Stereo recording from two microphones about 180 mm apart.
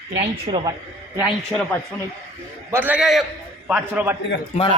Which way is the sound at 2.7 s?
10° right (ahead or behind).